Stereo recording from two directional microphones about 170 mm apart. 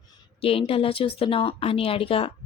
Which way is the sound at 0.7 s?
35° left (ahead or behind).